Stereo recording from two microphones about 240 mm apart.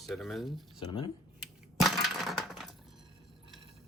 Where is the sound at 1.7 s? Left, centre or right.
Centre.